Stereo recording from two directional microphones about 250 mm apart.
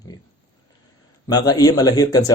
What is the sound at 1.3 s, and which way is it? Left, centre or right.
Speech, centre.